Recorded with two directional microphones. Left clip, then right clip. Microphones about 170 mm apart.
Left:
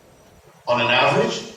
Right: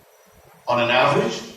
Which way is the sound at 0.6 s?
30° left (ahead or behind).